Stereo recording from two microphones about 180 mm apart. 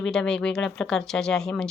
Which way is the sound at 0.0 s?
5° left (ahead or behind).